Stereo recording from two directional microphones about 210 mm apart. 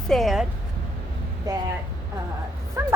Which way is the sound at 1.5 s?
15° right (ahead or behind).